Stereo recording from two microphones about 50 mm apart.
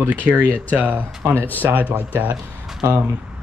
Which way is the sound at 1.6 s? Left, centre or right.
Right.